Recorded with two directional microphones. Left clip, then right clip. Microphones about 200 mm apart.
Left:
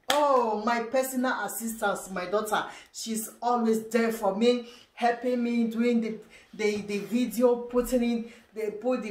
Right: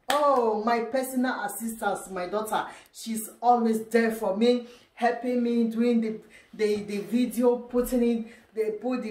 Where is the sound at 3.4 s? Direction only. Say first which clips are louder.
Right 4 dB; centre (ahead or behind).